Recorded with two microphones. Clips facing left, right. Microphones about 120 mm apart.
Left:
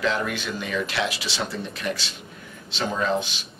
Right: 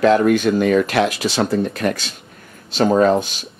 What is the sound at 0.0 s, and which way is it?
Speech, 50° right (ahead or behind).